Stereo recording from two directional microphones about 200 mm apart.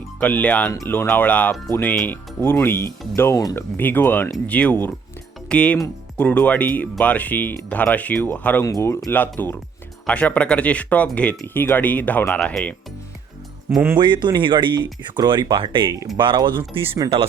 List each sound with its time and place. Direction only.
0.2 s speech: 5° left (ahead or behind)
13.7 s speech: 5° right (ahead or behind)
14.0 s speech: 20° right (ahead or behind)